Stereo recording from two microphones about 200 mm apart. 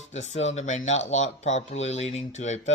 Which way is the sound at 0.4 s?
35° left (ahead or behind).